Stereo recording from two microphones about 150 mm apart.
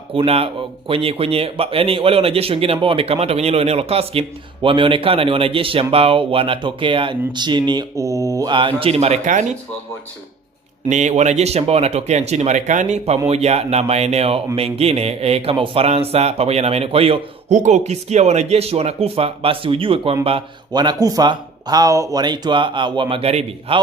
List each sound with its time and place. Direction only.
0.1 s speech: 40° right (ahead or behind)
10.9 s speech: 50° right (ahead or behind)